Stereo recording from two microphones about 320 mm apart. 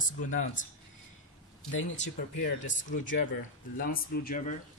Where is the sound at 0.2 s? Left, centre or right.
Left.